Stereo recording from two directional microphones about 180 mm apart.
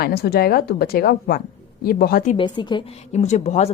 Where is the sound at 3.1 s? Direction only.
40° left (ahead or behind).